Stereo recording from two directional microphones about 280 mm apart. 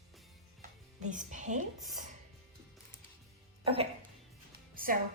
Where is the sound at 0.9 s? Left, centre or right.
Right.